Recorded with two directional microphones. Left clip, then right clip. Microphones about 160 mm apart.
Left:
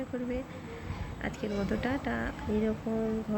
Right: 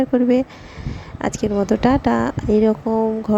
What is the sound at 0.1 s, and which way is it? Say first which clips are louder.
Speech: right 19 dB; 65° right (ahead or behind).